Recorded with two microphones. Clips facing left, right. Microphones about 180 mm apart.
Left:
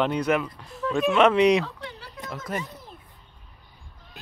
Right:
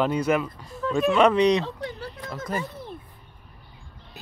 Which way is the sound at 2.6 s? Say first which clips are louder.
Right 4 dB; 65° right (ahead or behind).